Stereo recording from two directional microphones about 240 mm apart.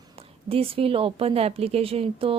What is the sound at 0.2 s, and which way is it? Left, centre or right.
Speech, right.